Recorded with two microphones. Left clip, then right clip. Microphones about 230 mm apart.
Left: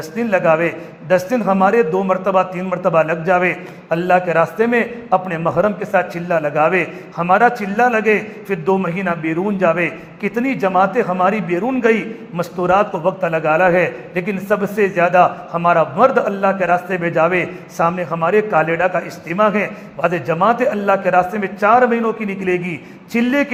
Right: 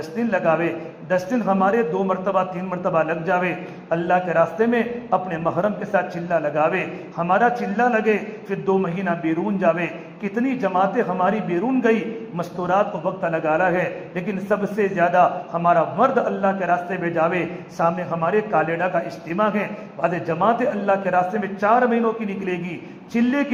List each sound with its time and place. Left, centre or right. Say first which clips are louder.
0.2 s a man's voice: left 6 dB; left